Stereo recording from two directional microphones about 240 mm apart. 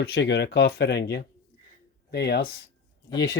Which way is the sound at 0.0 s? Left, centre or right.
Left.